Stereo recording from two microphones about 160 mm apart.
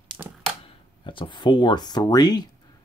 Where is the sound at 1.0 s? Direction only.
30° left (ahead or behind).